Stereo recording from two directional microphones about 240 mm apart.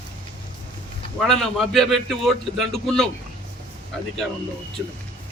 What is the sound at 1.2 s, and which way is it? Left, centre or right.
A man's voice, centre.